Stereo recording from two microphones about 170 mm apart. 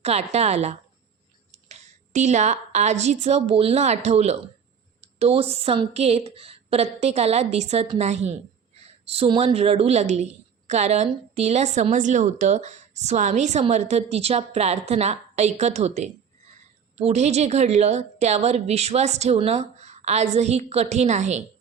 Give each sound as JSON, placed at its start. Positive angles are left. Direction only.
{"t": 0.0, "sound": "a woman's voice", "side_deg": -40}